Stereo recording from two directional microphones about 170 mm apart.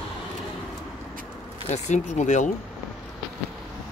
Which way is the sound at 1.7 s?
45° left (ahead or behind).